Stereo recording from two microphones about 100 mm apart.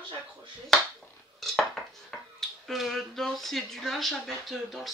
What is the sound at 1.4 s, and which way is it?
Cutlery, centre (ahead or behind).